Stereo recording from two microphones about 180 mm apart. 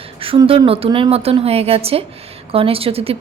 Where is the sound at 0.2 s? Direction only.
30° right (ahead or behind).